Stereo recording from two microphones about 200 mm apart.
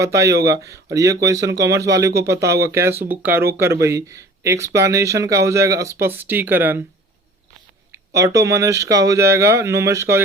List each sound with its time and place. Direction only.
0.0 s speech: 15° right (ahead or behind)
7.9 s speech: 15° right (ahead or behind)